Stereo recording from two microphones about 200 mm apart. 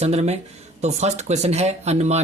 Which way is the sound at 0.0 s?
30° right (ahead or behind).